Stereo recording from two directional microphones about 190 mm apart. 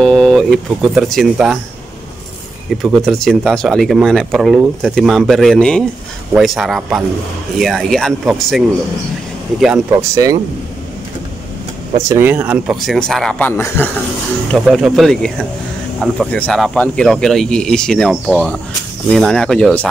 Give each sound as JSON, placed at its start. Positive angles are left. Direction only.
{"t": 0.0, "sound": "speech", "side_deg": 5}
{"t": 2.8, "sound": "speech", "side_deg": 0}
{"t": 9.9, "sound": "speech", "side_deg": -15}
{"t": 12.1, "sound": "speech", "side_deg": -10}
{"t": 14.5, "sound": "speech", "side_deg": 0}